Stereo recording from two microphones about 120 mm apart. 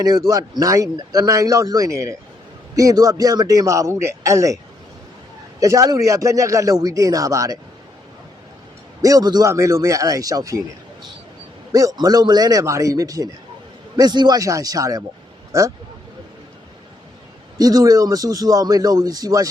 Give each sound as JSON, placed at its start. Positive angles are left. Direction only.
{"t": 0.0, "sound": "speech", "side_deg": -30}
{"t": 9.0, "sound": "speech", "side_deg": -30}
{"t": 11.7, "sound": "speech", "side_deg": -30}
{"t": 17.6, "sound": "speech", "side_deg": -30}